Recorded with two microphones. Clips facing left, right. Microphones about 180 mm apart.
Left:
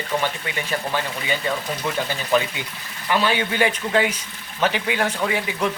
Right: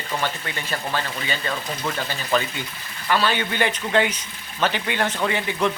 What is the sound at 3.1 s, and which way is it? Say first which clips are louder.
Speech: left 1 dB; 15° left (ahead or behind).